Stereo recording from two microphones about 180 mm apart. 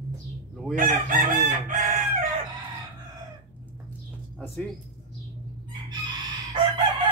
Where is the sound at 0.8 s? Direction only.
45° right (ahead or behind).